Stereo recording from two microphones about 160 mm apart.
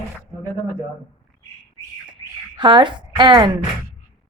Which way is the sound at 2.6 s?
30° right (ahead or behind).